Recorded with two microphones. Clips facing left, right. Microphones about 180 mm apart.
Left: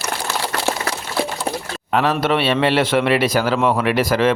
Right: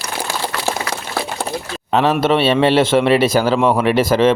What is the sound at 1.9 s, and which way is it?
A man's voice, 25° right (ahead or behind).